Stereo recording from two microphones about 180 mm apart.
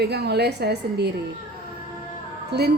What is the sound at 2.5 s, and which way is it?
Speech, 70° right (ahead or behind).